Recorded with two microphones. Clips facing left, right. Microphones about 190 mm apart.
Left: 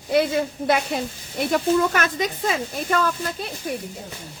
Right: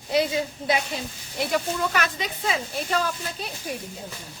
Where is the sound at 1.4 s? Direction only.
50° left (ahead or behind).